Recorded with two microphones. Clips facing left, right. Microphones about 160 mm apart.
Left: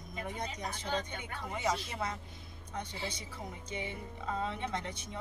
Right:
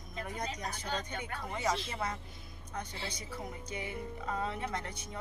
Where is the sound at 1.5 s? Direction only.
10° left (ahead or behind).